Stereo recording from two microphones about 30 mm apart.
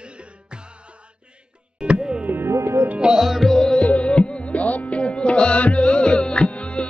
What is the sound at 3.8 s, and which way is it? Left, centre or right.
Music, left.